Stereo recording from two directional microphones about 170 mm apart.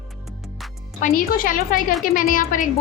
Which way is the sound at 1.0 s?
55° left (ahead or behind).